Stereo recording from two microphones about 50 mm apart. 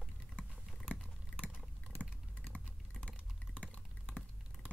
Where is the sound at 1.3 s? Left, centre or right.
Left.